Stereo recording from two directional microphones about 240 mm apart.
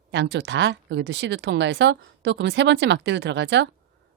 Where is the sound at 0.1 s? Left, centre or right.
Right.